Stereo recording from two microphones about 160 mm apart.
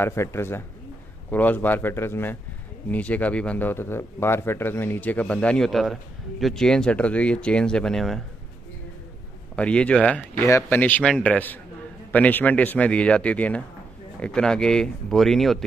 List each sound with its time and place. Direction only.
0.0 s speech: 15° left (ahead or behind)
9.6 s speech: 5° left (ahead or behind)